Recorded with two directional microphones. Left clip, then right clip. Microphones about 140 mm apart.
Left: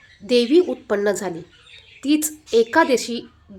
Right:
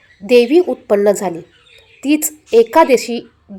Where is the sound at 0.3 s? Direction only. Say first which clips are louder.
Right 6 dB; 20° right (ahead or behind).